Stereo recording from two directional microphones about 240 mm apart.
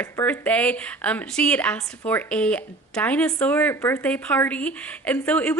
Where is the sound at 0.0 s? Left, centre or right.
Centre.